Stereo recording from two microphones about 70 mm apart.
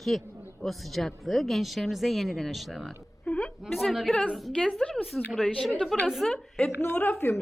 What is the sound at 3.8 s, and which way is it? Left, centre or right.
A woman's voice, centre.